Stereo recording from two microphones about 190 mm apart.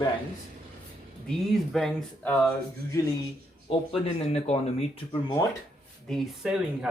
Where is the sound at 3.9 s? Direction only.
30° left (ahead or behind).